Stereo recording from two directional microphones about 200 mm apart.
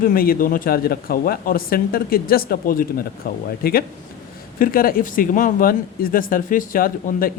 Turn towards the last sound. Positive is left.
turn(degrees=45)  # may be behind; listen again after turning